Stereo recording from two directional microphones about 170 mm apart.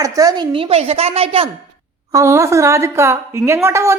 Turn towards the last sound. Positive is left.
turn(degrees=-15)  # may be behind; listen again after turning